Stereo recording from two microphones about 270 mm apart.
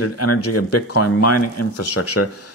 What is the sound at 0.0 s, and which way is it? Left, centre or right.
Speech, left.